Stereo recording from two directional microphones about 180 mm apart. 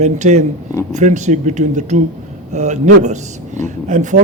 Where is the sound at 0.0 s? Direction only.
40° right (ahead or behind).